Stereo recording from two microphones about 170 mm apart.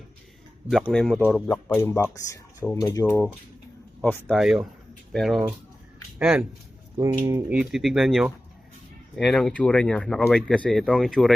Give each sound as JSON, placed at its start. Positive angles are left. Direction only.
{"t": 0.7, "sound": "speech", "side_deg": 5}
{"t": 4.4, "sound": "speech", "side_deg": 0}
{"t": 6.9, "sound": "speech", "side_deg": -20}
{"t": 7.5, "sound": "speech", "side_deg": -5}